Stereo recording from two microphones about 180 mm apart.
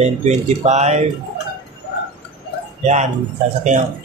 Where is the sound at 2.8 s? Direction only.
40° right (ahead or behind).